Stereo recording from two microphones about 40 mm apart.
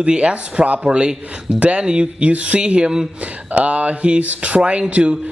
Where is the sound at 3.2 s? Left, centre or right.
Right.